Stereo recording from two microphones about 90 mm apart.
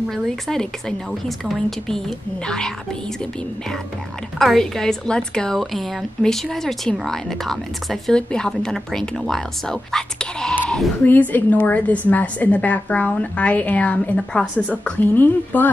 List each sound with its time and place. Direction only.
0.1 s a woman's voice: 5° left (ahead or behind)
4.4 s a woman's voice: 5° left (ahead or behind)
10.5 s bleat: 15° left (ahead or behind)
11.1 s a woman's voice: 20° left (ahead or behind)